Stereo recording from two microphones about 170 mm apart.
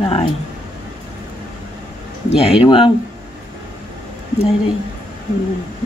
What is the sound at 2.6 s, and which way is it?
Speech, 30° left (ahead or behind).